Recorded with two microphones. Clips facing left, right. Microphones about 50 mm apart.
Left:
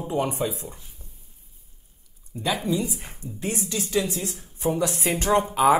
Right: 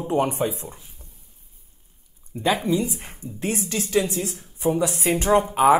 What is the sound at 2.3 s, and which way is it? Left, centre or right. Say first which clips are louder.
Speech: right 4 dB; right.